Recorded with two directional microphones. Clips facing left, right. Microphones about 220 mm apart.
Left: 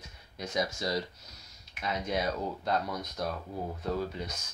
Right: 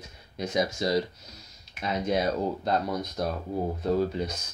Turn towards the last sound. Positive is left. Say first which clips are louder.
# right 7 dB
turn(degrees=-35)  # may be behind; listen again after turning